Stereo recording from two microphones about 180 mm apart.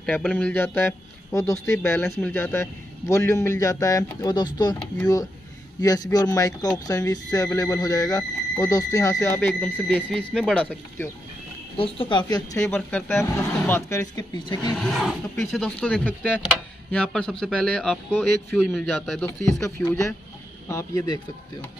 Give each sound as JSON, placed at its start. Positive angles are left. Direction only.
{"t": 0.0, "sound": "a man's voice", "side_deg": 5}
{"t": 11.7, "sound": "a man's voice", "side_deg": 30}
{"t": 14.8, "sound": "a man's voice", "side_deg": 0}
{"t": 16.9, "sound": "a man's voice", "side_deg": 5}
{"t": 19.6, "sound": "a man's voice", "side_deg": 15}